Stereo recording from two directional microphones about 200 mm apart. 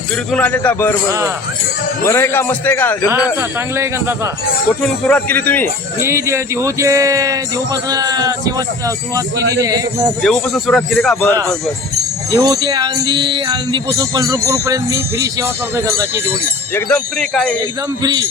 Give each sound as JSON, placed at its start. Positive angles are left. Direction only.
{"t": 0.3, "sound": "speech", "side_deg": 5}
{"t": 2.0, "sound": "speech", "side_deg": 10}
{"t": 3.8, "sound": "music", "side_deg": -15}
{"t": 5.0, "sound": "speech", "side_deg": 5}
{"t": 6.0, "sound": "music", "side_deg": -15}
{"t": 10.2, "sound": "a man's voice", "side_deg": 0}
{"t": 12.3, "sound": "music", "side_deg": -20}
{"t": 16.7, "sound": "a man's voice", "side_deg": 5}
{"t": 18.0, "sound": "a man's voice", "side_deg": -20}